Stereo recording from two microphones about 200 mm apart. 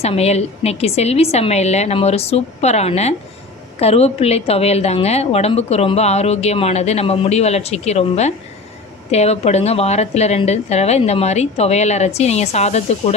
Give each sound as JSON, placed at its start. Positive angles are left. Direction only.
{"t": 0.0, "sound": "a woman's voice", "side_deg": 30}